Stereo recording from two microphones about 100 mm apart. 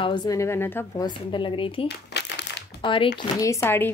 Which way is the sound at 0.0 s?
50° left (ahead or behind).